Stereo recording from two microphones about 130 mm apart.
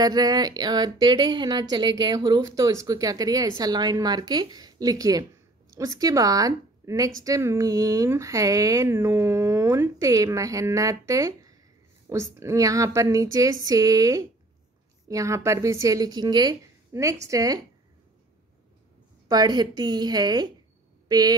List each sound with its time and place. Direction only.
0.0 s a woman's voice: 30° right (ahead or behind)
19.2 s speech: 30° right (ahead or behind)